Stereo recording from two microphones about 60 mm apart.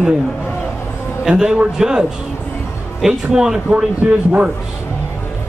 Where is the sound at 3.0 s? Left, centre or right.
Centre.